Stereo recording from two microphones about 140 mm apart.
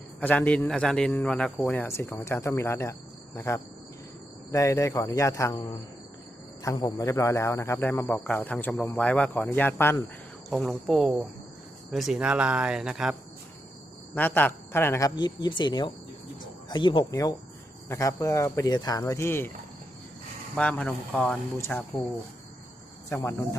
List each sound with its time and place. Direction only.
0.2 s speech: 10° left (ahead or behind)
6.6 s speech: 25° left (ahead or behind)
10.5 s speech: centre (ahead or behind)
14.2 s speech: 10° left (ahead or behind)
15.1 s speech: 30° left (ahead or behind)
20.6 s speech: 10° left (ahead or behind)
23.0 s speech: 20° left (ahead or behind)